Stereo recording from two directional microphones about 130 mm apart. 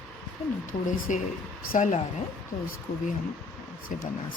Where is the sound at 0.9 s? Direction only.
75° left (ahead or behind).